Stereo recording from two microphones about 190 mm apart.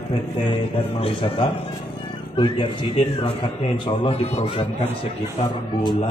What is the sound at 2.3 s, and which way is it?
Speech, 25° left (ahead or behind).